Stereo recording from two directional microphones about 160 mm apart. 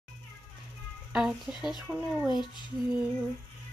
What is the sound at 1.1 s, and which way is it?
Speech, 5° right (ahead or behind).